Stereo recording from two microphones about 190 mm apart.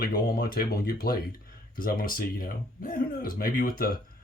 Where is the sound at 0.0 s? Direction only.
50° left (ahead or behind).